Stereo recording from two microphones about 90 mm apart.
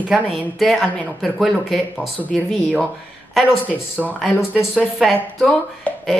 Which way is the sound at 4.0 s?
10° right (ahead or behind).